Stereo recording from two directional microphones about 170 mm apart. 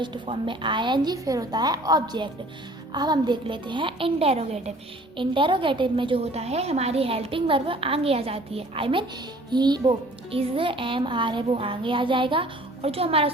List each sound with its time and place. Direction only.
0.0 s a woman's voice: 30° right (ahead or behind)
5.1 s a woman's voice: 30° right (ahead or behind)